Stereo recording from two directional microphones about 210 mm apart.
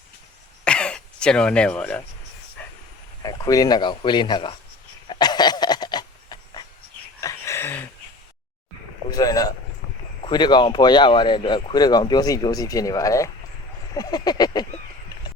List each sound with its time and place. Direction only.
0.6 s throat clearing: 5° left (ahead or behind)
3.2 s speech: 15° left (ahead or behind)
5.0 s a sound: 20° left (ahead or behind)
9.0 s speech: 20° left (ahead or behind)